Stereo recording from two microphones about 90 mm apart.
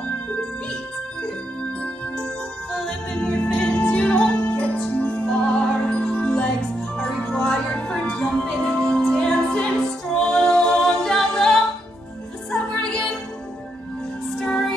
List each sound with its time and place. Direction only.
2.7 s music: 5° left (ahead or behind)
14.4 s music: 5° left (ahead or behind)